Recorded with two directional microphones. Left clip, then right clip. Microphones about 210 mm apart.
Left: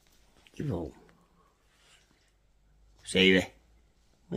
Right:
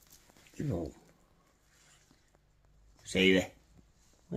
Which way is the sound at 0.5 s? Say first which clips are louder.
Left 2 dB; 20° left (ahead or behind).